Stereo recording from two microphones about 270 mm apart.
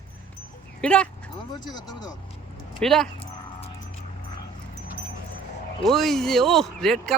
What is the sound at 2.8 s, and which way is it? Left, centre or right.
Speech, centre.